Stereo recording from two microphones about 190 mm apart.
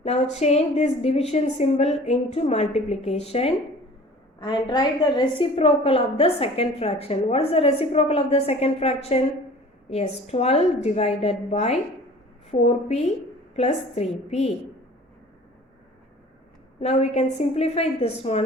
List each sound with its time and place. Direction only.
0.0 s a woman's voice: 35° left (ahead or behind)
16.8 s a woman's voice: 35° left (ahead or behind)